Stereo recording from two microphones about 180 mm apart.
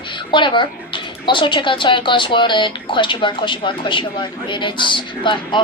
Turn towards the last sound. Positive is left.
turn(degrees=25)  # may be behind; listen again after turning